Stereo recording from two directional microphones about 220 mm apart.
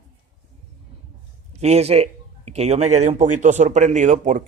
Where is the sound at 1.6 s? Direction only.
30° right (ahead or behind).